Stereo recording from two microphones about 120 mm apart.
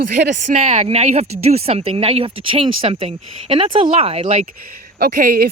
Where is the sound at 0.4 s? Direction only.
70° right (ahead or behind).